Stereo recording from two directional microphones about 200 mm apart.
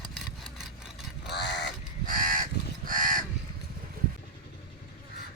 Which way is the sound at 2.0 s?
45° right (ahead or behind).